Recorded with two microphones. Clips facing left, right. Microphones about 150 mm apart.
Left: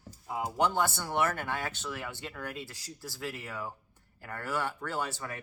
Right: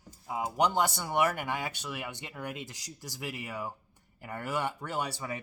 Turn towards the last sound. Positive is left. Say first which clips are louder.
# right 1 dB
turn(degrees=-15)  # may be behind; listen again after turning